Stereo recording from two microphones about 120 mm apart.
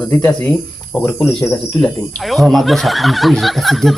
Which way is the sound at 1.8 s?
Centre (ahead or behind).